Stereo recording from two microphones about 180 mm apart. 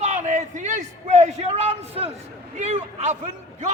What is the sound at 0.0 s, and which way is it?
A man's voice, 40° right (ahead or behind).